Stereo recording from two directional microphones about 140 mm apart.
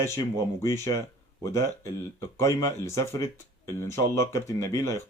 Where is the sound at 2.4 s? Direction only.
20° left (ahead or behind).